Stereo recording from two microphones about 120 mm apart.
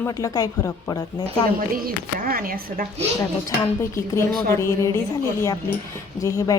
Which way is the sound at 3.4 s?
25° left (ahead or behind).